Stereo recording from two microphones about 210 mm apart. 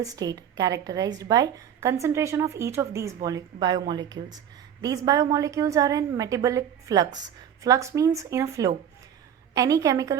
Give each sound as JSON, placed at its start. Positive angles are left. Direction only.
{"t": 0.0, "sound": "a woman's voice", "side_deg": -15}